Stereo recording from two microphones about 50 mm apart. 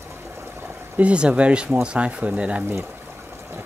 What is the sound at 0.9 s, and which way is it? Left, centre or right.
Speech, right.